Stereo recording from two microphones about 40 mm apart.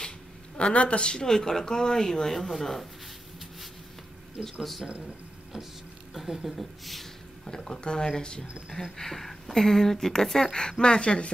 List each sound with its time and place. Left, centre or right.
0.6 s speech: left; by 2.9 s centre
4.4 s speech: centre
6.1 s speech: centre
7.4 s speech: centre
8.9 s speech: centre